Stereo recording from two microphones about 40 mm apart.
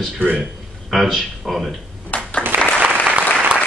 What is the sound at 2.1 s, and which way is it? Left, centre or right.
Applause, left.